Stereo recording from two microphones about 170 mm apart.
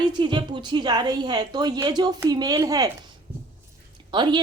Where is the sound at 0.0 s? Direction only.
25° right (ahead or behind).